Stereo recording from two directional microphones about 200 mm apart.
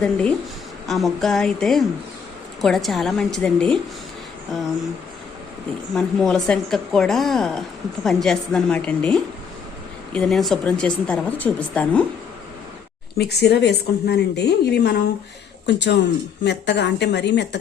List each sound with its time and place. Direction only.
0.0 s a woman's voice: 5° left (ahead or behind)
5.9 s a woman's voice: centre (ahead or behind)
13.1 s a woman's voice: 55° left (ahead or behind)